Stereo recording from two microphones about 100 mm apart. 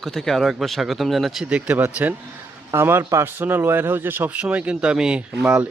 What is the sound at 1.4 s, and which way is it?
A man's voice, 15° right (ahead or behind).